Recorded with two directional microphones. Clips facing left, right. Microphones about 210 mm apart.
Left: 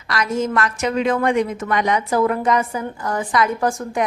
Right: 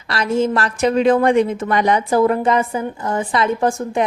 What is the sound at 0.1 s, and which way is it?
A woman's voice, 30° right (ahead or behind).